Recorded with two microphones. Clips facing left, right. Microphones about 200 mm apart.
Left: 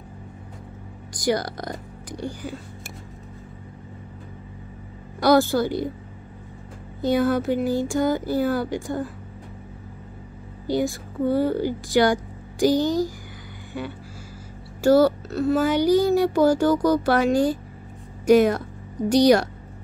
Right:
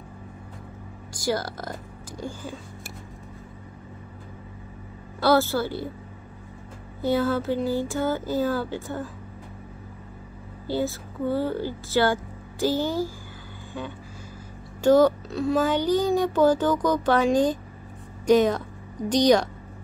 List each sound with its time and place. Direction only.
1.1 s speech: 15° left (ahead or behind)
5.2 s speech: 15° left (ahead or behind)
7.0 s speech: 15° left (ahead or behind)
10.7 s speech: 15° left (ahead or behind)
14.8 s speech: 10° left (ahead or behind)